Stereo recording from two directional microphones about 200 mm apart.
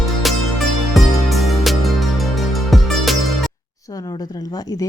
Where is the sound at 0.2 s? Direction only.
Centre (ahead or behind).